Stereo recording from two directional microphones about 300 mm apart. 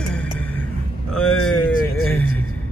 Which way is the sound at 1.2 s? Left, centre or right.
Left.